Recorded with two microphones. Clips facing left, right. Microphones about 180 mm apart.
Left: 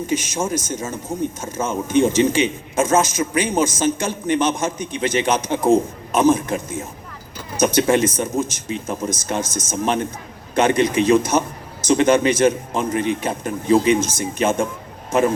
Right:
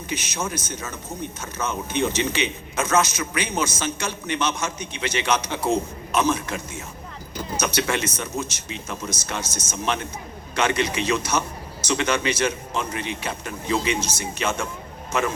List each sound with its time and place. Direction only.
0.1 s speech: 45° left (ahead or behind)